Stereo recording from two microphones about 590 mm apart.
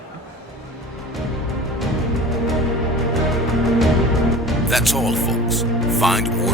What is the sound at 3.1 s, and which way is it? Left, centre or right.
Speech, centre.